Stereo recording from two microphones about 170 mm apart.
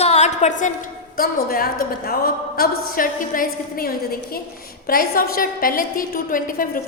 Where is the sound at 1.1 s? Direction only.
60° left (ahead or behind).